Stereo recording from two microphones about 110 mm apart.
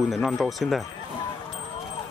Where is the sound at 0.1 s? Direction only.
Centre (ahead or behind).